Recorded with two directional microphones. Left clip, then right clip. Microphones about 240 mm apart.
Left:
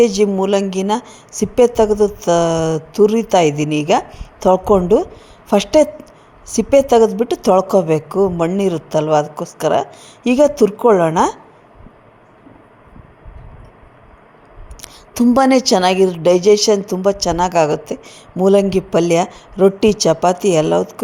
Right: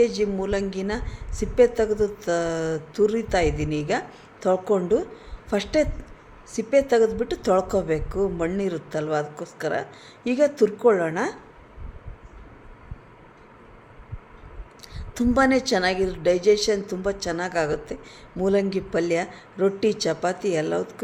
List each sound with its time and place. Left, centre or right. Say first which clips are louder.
0.0 s a woman's voice: left 9 dB; left
14.8 s a woman's voice: left 10 dB; left